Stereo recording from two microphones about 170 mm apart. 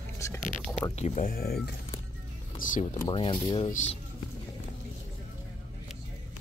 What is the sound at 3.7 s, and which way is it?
Speech, 45° left (ahead or behind).